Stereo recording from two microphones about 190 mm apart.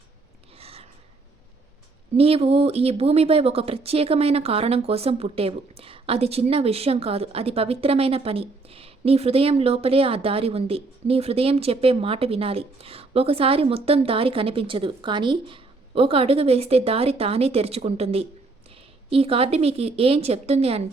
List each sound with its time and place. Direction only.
0.6 s gasp: 30° right (ahead or behind)
2.1 s speech: 30° right (ahead or behind)